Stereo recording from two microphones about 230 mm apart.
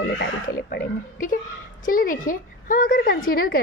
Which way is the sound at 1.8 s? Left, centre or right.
Left.